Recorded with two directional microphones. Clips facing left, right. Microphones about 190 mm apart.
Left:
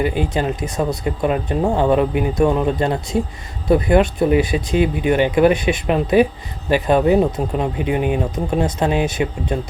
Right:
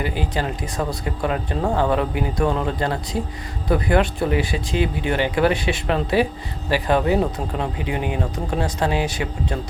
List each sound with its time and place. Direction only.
0.0 s speech: 20° left (ahead or behind)